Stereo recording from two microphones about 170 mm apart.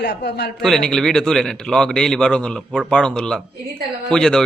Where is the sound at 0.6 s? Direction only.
Centre (ahead or behind).